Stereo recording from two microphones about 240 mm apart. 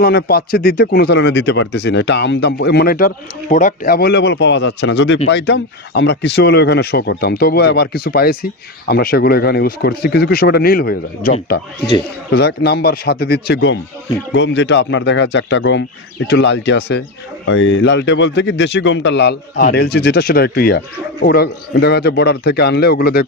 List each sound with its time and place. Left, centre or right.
0.0 s speech: left